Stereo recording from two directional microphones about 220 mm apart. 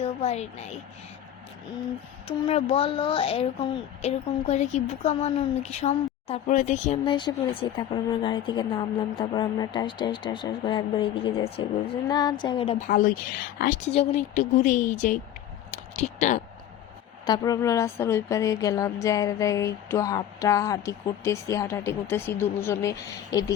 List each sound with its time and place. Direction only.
0.0 s a woman's voice: 30° left (ahead or behind)
2.2 s speech: 30° left (ahead or behind)
12.9 s speech: 40° left (ahead or behind)
17.2 s speech: 15° left (ahead or behind)